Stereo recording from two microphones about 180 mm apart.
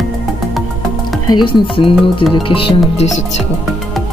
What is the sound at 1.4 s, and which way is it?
Music, 30° left (ahead or behind).